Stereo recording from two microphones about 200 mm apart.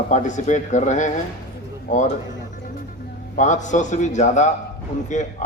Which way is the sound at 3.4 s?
40° left (ahead or behind).